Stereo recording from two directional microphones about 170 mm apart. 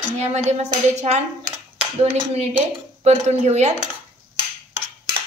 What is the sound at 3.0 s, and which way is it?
Speech, 40° right (ahead or behind).